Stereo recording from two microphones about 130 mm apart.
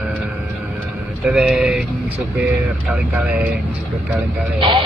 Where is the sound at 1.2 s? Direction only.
5° right (ahead or behind).